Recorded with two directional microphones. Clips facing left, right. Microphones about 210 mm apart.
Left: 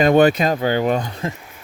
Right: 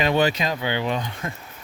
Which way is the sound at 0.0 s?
50° left (ahead or behind).